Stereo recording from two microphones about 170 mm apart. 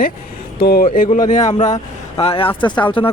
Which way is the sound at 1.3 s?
45° left (ahead or behind).